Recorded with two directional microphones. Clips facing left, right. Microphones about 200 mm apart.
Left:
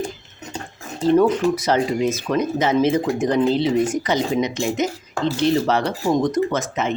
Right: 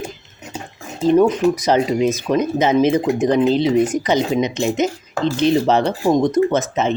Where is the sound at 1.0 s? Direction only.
15° right (ahead or behind).